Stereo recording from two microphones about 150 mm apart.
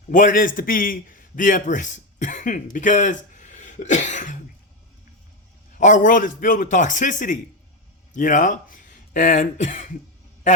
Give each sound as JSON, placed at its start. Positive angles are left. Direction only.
{"t": 0.1, "sound": "a man's voice", "side_deg": 60}
{"t": 5.7, "sound": "a man's voice", "side_deg": 60}